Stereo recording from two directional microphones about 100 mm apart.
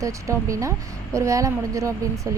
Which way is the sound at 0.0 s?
30° right (ahead or behind).